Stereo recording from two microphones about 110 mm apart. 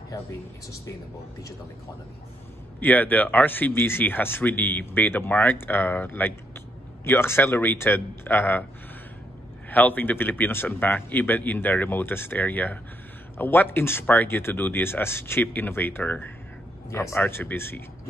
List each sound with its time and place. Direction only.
2.8 s speech: 15° left (ahead or behind)
9.7 s speech: 15° left (ahead or behind)